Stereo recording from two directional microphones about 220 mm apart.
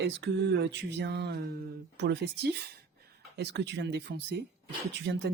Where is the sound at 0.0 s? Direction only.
50° right (ahead or behind).